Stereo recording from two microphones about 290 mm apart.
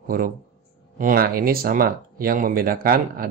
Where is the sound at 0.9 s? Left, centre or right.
Right.